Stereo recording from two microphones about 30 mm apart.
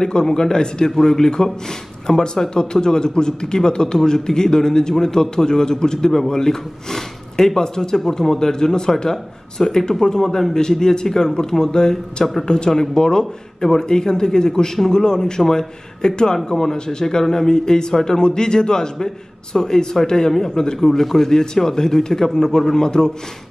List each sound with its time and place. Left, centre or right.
0.0 s a man's voice: left
22.8 s a man's voice: left